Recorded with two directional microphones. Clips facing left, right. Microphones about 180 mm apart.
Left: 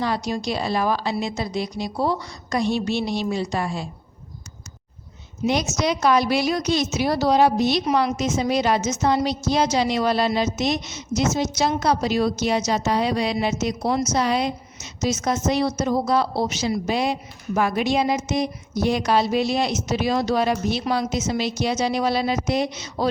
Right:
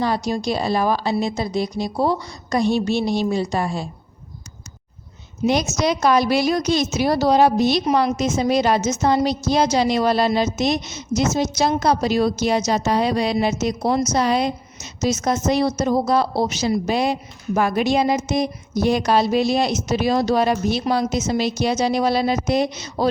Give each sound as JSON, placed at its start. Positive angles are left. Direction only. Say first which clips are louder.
{"t": 0.0, "sound": "a woman's voice", "louder": "right 3 dB", "side_deg": -40}
{"t": 5.5, "sound": "a woman's voice", "louder": "right 3 dB", "side_deg": -40}